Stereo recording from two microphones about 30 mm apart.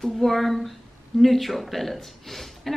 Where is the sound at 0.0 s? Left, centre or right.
Centre.